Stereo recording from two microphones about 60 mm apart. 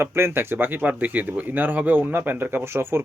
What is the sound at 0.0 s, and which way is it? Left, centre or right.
Speech, right.